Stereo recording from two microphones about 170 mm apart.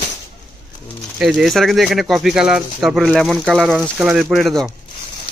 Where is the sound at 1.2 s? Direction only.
Centre (ahead or behind).